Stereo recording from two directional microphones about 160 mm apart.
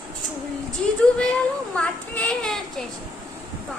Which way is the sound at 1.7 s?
5° left (ahead or behind).